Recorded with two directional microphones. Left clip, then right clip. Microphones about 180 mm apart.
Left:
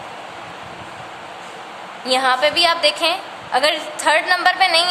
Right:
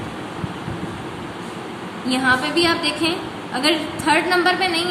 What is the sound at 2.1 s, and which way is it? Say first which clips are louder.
A woman's voice: left 3 dB; 60° left (ahead or behind).